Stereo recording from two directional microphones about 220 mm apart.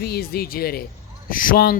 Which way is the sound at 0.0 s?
45° left (ahead or behind).